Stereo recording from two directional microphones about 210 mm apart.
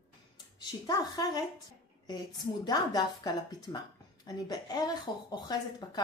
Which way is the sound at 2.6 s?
20° left (ahead or behind).